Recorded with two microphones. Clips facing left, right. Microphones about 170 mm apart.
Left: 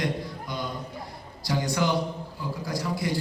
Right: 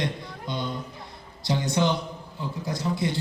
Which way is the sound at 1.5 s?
25° right (ahead or behind).